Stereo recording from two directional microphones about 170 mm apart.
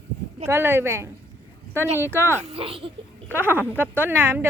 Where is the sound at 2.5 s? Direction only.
35° right (ahead or behind).